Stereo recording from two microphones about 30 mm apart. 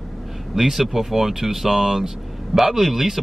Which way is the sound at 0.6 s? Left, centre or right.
Centre.